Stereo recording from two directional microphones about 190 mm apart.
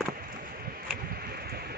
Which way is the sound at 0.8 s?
55° right (ahead or behind).